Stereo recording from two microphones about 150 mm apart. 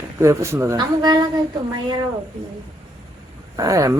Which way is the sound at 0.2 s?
20° right (ahead or behind).